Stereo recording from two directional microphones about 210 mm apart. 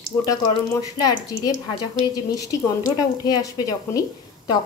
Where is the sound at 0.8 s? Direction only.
20° left (ahead or behind).